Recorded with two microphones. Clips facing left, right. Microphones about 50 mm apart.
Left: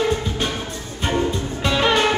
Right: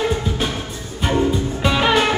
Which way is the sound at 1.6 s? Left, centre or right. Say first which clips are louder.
Right 1 dB; centre.